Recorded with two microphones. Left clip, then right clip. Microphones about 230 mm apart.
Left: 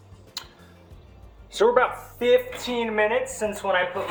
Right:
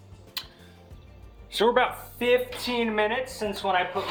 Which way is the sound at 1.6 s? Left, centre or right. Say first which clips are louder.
Left 3 dB; right.